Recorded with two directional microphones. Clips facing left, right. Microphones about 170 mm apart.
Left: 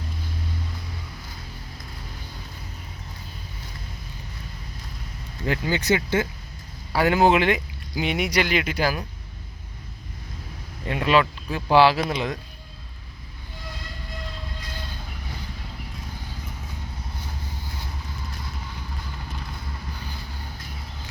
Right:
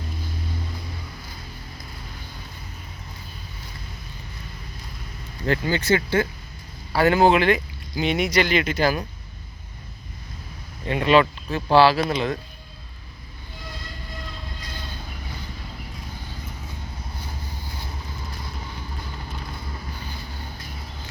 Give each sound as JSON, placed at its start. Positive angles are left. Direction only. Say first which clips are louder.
{"t": 5.5, "sound": "speech", "louder": "right 2 dB", "side_deg": 15}
{"t": 10.9, "sound": "speech", "louder": "right 3 dB", "side_deg": 5}
{"t": 11.7, "sound": "speech", "louder": "right 1 dB", "side_deg": 15}